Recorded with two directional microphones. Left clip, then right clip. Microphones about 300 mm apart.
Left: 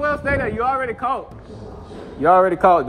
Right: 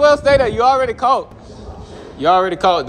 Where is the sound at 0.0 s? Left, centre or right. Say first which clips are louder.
Right 9 dB; centre.